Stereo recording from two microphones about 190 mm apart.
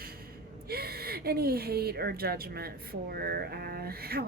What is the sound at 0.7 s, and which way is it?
A woman's voice, 55° right (ahead or behind).